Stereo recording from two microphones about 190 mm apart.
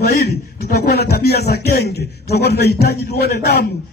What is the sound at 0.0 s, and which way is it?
Music, 60° left (ahead or behind).